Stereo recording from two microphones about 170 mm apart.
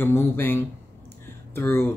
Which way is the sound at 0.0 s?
10° left (ahead or behind).